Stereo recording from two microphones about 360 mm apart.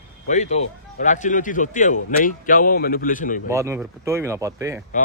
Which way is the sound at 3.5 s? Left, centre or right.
Centre.